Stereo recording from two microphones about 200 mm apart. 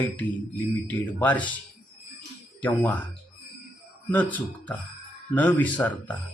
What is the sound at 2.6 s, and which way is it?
Speech, 10° left (ahead or behind).